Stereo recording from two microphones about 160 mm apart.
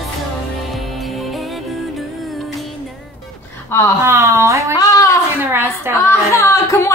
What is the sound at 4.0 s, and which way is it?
Speech, 15° right (ahead or behind).